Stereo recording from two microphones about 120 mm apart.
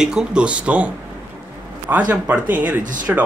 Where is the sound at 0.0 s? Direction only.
5° right (ahead or behind).